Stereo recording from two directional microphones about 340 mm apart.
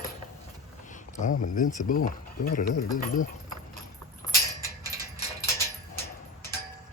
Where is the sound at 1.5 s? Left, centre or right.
Left.